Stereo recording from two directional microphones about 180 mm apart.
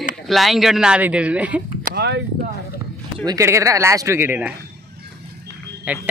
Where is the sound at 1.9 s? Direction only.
65° right (ahead or behind).